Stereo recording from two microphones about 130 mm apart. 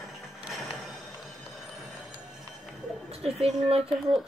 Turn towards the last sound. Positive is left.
turn(degrees=0)  # may be behind; listen again after turning